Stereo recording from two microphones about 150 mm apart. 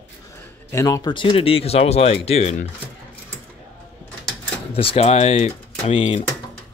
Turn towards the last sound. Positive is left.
turn(degrees=40)  # may be behind; listen again after turning